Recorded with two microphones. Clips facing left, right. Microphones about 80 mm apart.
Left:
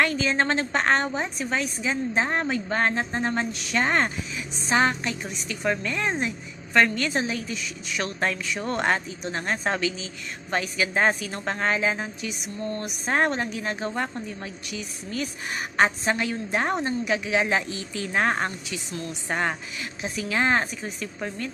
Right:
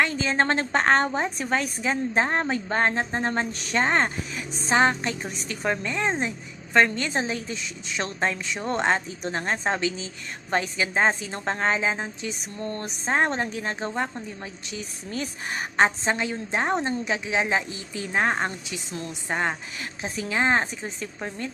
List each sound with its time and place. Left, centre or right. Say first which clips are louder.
0.0 s a woman's voice: even; right
3.8 s a woman's voice: even; right
5.7 s a woman's voice: right 1 dB; right
9.0 s a woman's voice: right 1 dB; right
12.3 s a woman's voice: left 1 dB; right
13.1 s a woman's voice: even; right
14.8 s a woman's voice: left 1 dB; right
15.8 s a woman's voice: even; right
19.8 s a woman's voice: even; right